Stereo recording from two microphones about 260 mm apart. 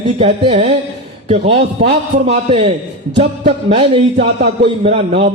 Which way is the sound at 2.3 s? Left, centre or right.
Right.